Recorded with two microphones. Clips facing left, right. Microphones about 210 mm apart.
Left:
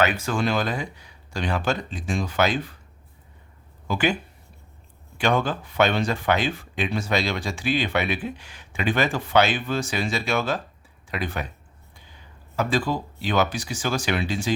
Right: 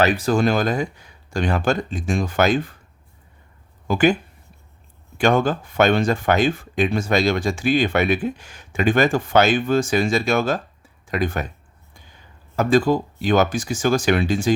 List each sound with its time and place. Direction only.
0.0 s speech: 35° right (ahead or behind)
3.8 s speech: 45° right (ahead or behind)
12.5 s speech: 45° right (ahead or behind)